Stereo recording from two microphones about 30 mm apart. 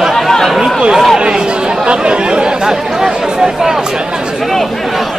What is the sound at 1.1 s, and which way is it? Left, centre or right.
Speech, right.